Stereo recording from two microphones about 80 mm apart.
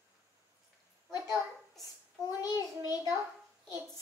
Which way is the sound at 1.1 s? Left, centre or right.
Left.